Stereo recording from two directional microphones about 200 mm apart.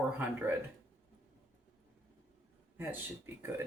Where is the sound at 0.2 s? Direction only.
10° right (ahead or behind).